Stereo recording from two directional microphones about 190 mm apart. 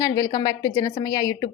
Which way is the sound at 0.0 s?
20° left (ahead or behind).